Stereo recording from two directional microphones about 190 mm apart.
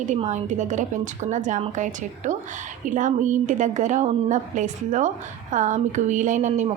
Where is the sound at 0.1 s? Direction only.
35° right (ahead or behind).